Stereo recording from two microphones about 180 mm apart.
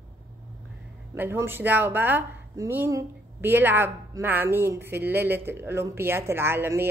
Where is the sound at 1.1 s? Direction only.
10° right (ahead or behind).